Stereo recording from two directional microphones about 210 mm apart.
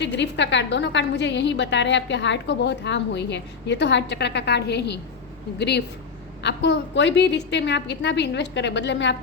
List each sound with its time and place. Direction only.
0.0 s a woman's voice: 55° left (ahead or behind)